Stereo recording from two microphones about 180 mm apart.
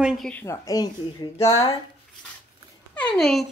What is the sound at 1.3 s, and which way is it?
Speech, 35° left (ahead or behind).